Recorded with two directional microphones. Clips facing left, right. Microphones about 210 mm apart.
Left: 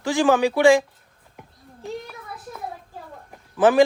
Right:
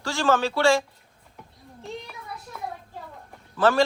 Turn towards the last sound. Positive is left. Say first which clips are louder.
# left 4 dB
turn(degrees=15)  # may be behind; listen again after turning